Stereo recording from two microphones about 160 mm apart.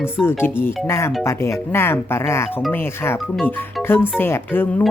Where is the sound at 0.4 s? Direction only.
15° left (ahead or behind).